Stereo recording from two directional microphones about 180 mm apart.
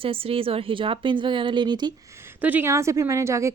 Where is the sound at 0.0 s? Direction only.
30° right (ahead or behind).